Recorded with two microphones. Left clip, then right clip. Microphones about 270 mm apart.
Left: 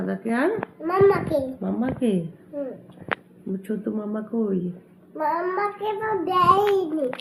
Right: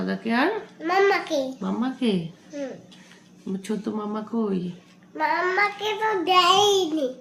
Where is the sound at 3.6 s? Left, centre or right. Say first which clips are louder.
Even; centre.